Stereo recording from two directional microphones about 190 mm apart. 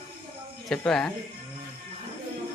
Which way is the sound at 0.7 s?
5° left (ahead or behind).